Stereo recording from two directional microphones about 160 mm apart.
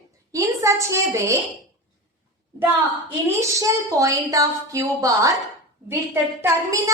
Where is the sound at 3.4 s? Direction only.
20° right (ahead or behind).